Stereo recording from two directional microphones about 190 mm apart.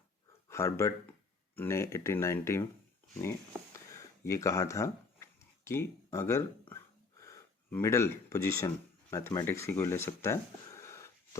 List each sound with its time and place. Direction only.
0.4 s speech: 15° left (ahead or behind)
4.3 s speech: 15° left (ahead or behind)